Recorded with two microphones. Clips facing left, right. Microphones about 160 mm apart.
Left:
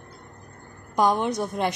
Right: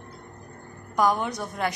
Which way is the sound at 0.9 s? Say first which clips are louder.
Left 2 dB; 25° left (ahead or behind).